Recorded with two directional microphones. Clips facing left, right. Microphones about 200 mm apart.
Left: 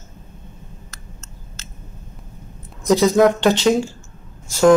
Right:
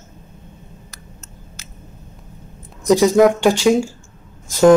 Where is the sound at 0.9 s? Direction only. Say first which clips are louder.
Right 1 dB; 15° right (ahead or behind).